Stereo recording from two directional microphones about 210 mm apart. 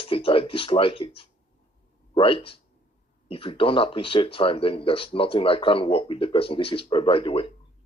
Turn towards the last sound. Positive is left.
turn(degrees=25)  # may be behind; listen again after turning